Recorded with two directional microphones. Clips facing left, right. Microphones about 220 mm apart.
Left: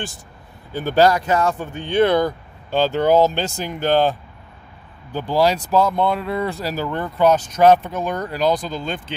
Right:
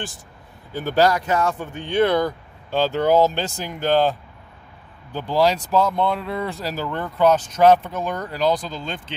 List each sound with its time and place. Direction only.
0.7 s speech: 25° left (ahead or behind)
5.1 s speech: 10° left (ahead or behind)